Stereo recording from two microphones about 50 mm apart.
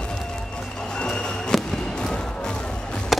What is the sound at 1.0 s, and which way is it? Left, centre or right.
Music, centre.